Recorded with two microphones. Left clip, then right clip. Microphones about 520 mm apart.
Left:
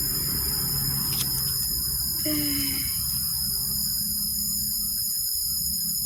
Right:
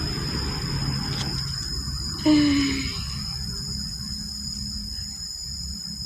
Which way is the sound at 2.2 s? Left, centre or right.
Left.